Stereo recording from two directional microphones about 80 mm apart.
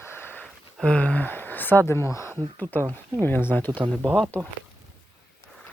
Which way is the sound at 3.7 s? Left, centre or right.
Right.